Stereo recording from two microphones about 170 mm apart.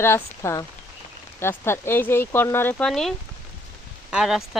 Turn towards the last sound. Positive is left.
turn(degrees=0)  # may be behind; listen again after turning